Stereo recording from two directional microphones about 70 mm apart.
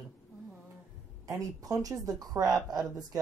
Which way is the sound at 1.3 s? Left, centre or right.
Right.